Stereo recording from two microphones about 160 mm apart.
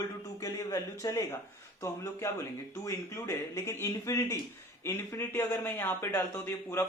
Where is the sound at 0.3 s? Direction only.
20° left (ahead or behind).